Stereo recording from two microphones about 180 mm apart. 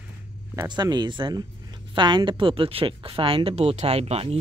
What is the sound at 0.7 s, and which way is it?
Speech, 25° right (ahead or behind).